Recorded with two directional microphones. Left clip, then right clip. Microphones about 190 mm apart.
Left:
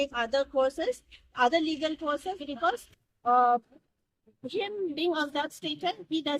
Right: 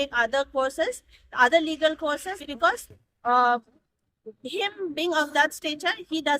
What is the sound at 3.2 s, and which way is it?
A woman's voice, 20° right (ahead or behind).